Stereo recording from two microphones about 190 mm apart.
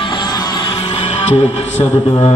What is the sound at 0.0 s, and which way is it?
Music, 25° left (ahead or behind).